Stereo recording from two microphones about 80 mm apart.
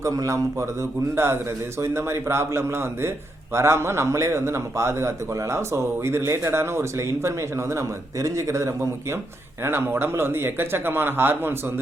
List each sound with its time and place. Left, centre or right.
0.0 s a man's voice: right